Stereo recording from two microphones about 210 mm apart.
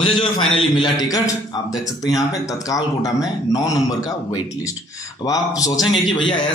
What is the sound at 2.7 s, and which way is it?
Speech, 15° left (ahead or behind).